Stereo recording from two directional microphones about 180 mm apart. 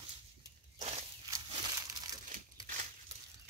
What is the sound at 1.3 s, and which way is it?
Crumpling, 20° right (ahead or behind).